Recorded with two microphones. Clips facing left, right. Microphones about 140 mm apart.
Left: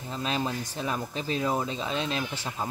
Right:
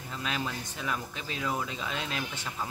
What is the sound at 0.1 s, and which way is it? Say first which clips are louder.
Speech: left 5 dB; 30° left (ahead or behind).